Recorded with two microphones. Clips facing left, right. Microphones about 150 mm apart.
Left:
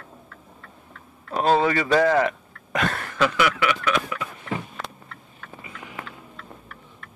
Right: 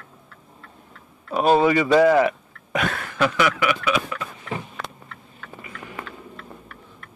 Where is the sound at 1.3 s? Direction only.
10° right (ahead or behind).